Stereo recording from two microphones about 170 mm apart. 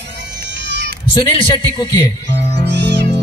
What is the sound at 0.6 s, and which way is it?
Cat, 90° right.